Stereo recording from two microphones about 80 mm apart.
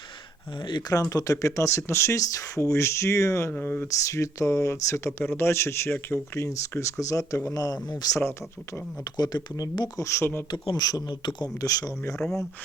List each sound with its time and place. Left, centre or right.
0.6 s speech: left
1.1 s speech: left
3.5 s speech: left
3.8 s speech: left
7.5 s speech: left
8.2 s speech: left
9.0 s speech: left
10.0 s speech: left
10.5 s speech: left
11.6 s speech: left
12.1 s speech: centre